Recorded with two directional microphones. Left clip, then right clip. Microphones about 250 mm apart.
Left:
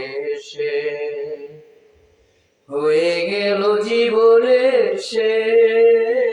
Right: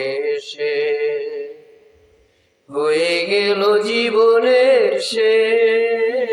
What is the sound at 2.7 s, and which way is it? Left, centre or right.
Mantra, right.